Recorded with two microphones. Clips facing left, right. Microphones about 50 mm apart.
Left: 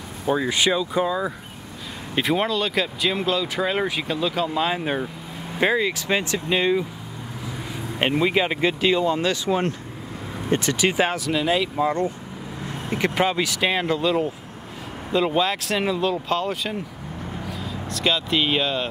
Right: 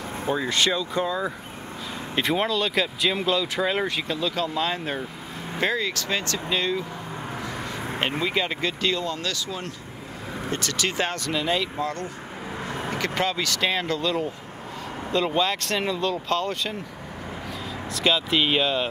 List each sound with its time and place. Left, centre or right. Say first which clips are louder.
0.3 s speech: left 3 dB; centre
8.2 s speech: left 7 dB; centre
9.5 s speech: left 11 dB; left
10.5 s speech: left 7 dB; centre
17.9 s speech: even; centre